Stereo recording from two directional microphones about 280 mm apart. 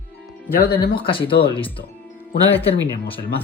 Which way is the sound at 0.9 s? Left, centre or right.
Centre.